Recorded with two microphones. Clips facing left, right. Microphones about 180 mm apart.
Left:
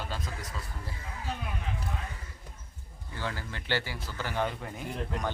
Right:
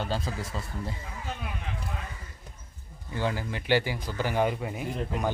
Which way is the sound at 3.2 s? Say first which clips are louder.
Right 7 dB; 15° right (ahead or behind).